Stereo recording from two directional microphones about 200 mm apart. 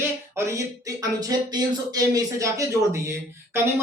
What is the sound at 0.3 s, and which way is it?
Speech, 15° right (ahead or behind).